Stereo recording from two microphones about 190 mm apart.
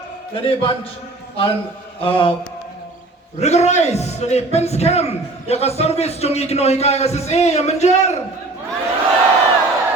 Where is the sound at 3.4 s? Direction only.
35° left (ahead or behind).